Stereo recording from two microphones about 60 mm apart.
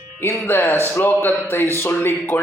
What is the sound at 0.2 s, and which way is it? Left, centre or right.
A man's voice, left.